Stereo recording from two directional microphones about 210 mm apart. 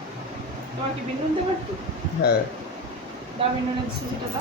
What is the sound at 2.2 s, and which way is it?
Speech, 50° left (ahead or behind).